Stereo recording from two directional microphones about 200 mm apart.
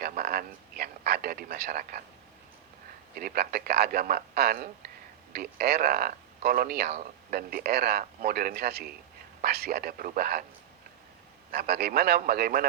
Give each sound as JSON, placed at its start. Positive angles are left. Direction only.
{"t": 0.0, "sound": "a man's voice", "side_deg": -50}
{"t": 3.2, "sound": "speech", "side_deg": -45}
{"t": 11.5, "sound": "speech", "side_deg": -50}